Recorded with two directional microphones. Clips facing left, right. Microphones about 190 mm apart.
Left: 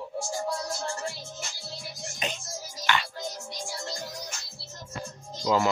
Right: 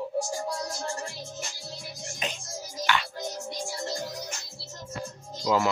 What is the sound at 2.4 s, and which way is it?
Music, 55° right (ahead or behind).